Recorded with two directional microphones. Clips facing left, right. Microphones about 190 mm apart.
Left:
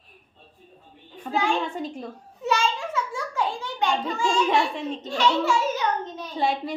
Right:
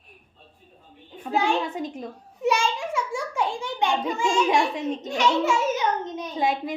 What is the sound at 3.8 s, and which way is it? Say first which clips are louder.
A child's voice: even; 20° right (ahead or behind).